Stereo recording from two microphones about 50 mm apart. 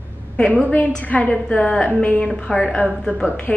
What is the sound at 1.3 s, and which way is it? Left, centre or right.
A woman's voice, left.